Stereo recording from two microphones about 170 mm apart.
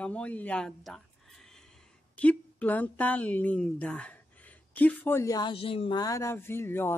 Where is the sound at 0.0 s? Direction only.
5° left (ahead or behind).